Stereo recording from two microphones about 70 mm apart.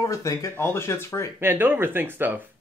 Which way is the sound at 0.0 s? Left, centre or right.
Left.